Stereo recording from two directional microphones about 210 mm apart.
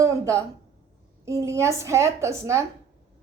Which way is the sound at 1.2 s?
15° right (ahead or behind).